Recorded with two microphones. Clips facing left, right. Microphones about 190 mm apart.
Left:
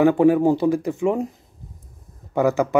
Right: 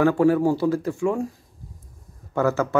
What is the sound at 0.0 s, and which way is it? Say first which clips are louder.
Speech: left 3 dB; 20° left (ahead or behind).